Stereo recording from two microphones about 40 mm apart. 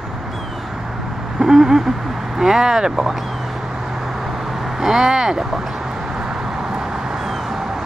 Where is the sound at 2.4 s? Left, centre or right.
Centre.